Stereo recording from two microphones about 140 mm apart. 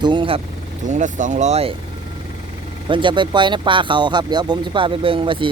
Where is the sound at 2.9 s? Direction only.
35° right (ahead or behind).